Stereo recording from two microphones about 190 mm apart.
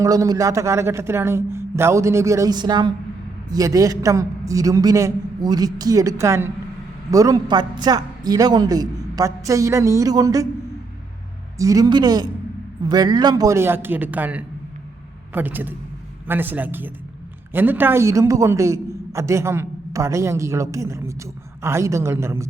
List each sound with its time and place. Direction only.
0.0 s a man's voice: 20° right (ahead or behind)
11.5 s a woman's voice: 15° right (ahead or behind)